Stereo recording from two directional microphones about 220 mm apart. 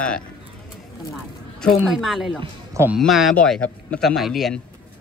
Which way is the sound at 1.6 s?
Centre (ahead or behind).